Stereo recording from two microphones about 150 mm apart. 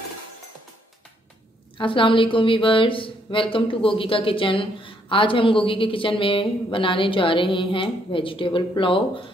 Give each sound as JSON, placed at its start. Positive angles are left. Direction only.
{"t": 1.8, "sound": "speech", "side_deg": 35}